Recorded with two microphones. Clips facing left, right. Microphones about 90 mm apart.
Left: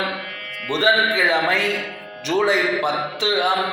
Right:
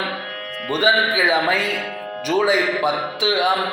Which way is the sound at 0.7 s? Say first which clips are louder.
Even; 5° right (ahead or behind).